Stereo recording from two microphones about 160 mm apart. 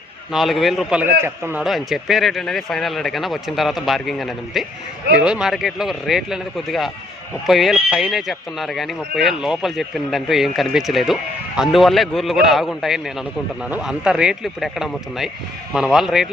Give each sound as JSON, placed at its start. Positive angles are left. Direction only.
{"t": 0.3, "sound": "a man's voice", "side_deg": 0}
{"t": 1.6, "sound": "speech", "side_deg": 0}